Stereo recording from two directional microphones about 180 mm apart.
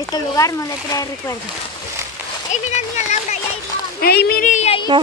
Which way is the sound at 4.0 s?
60° left (ahead or behind).